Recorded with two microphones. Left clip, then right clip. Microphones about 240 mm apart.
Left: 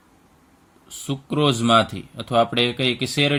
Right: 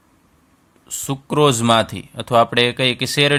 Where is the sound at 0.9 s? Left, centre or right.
Right.